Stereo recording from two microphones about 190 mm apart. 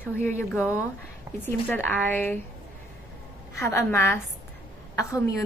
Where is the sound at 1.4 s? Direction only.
10° left (ahead or behind).